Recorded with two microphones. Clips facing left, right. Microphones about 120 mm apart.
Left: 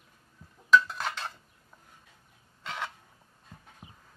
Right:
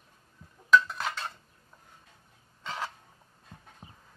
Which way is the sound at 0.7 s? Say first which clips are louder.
Even; centre (ahead or behind).